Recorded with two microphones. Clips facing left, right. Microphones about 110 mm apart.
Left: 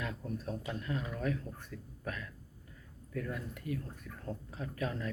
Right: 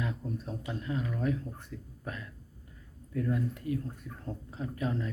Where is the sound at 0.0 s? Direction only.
20° right (ahead or behind).